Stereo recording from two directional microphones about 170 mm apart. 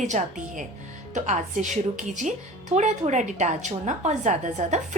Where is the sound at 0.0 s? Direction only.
50° right (ahead or behind).